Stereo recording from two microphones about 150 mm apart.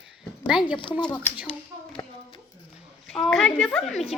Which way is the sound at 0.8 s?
35° left (ahead or behind).